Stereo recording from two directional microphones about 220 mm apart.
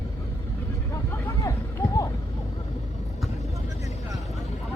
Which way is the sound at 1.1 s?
15° left (ahead or behind).